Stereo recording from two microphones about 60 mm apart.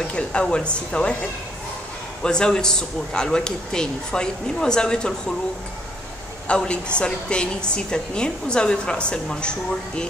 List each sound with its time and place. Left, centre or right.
0.1 s a man's voice: centre
2.2 s a man's voice: centre
6.4 s a woman's voice: centre